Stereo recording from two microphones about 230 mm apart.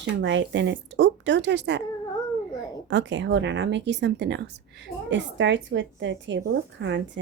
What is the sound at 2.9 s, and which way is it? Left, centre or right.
A woman's voice, right.